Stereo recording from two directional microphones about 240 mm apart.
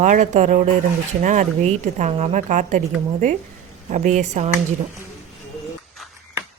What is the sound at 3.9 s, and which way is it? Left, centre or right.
Speech, right.